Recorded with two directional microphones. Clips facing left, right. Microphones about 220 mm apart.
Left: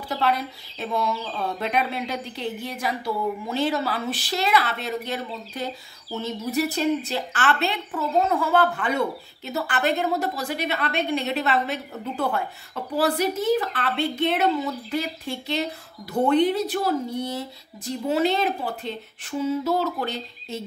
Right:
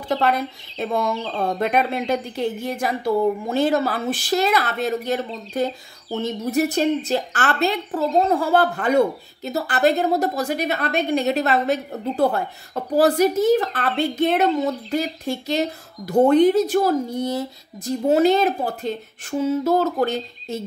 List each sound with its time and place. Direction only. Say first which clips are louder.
0.1 s a woman's voice: right 4 dB; 50° right (ahead or behind)